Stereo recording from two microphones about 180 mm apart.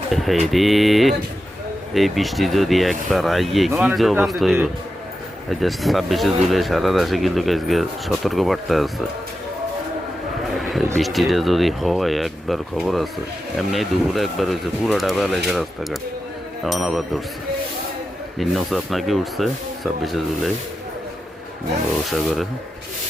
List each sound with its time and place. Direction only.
0.1 s a sound: centre (ahead or behind)
0.5 s speech: centre (ahead or behind)
10.6 s vehicle: centre (ahead or behind)
10.9 s speech: centre (ahead or behind)
18.3 s speech: centre (ahead or behind)